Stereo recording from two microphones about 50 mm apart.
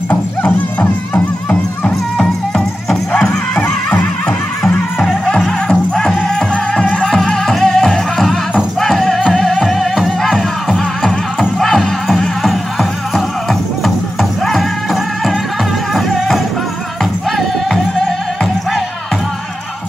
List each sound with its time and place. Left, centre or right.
0.1 s music: left
1.9 s music: centre
7.0 s music: centre